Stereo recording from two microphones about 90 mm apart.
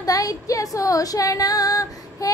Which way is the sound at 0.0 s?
40° left (ahead or behind).